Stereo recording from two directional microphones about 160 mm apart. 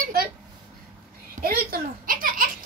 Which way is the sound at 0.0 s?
70° right (ahead or behind).